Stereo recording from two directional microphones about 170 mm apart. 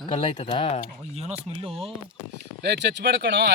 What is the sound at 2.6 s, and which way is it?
Speech, 85° right.